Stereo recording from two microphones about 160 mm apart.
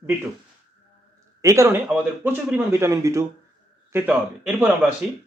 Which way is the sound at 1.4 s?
20° right (ahead or behind).